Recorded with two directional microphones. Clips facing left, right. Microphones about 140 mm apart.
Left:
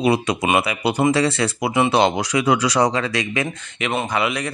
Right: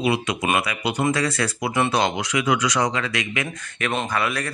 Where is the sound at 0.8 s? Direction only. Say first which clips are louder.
Left 5 dB; 30° left (ahead or behind).